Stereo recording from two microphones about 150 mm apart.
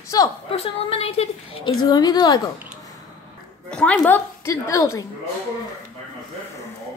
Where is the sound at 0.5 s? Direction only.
40° left (ahead or behind).